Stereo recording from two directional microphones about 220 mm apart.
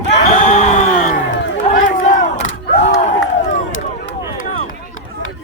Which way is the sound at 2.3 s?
30° left (ahead or behind).